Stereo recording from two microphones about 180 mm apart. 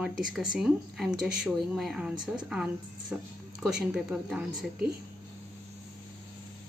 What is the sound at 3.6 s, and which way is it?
Speech, centre (ahead or behind).